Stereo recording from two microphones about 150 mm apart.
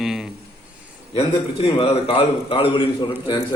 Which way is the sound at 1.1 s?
40° left (ahead or behind).